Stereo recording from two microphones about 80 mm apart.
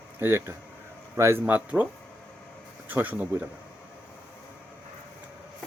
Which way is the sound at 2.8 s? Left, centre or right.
Right.